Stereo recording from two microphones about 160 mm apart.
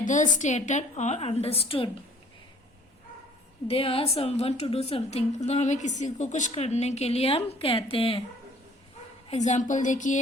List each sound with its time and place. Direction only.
0.0 s a woman's voice: 50° left (ahead or behind); by 1.9 s 35° left (ahead or behind)
3.7 s a woman's voice: 35° left (ahead or behind)
9.3 s a woman's voice: 45° left (ahead or behind)